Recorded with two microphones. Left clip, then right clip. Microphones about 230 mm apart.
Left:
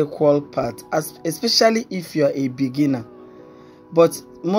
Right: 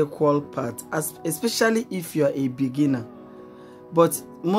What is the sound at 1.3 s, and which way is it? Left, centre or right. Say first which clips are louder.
Speech: left 5 dB; centre.